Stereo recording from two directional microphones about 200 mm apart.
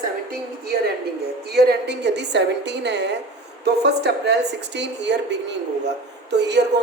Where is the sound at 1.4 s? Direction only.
55° right (ahead or behind).